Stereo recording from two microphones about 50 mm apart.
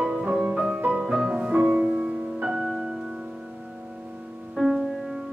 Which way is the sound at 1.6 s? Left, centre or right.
Right.